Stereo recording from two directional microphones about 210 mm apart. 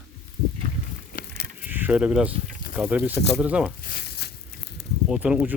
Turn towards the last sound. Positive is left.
turn(degrees=-5)  # may be behind; listen again after turning